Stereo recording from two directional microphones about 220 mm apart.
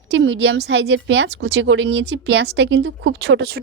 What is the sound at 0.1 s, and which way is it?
A woman's voice, 55° right (ahead or behind).